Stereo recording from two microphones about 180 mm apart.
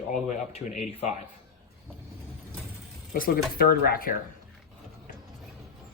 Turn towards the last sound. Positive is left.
turn(degrees=55)  # may be behind; listen again after turning